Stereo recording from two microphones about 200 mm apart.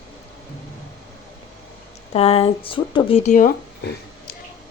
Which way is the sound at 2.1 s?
30° left (ahead or behind).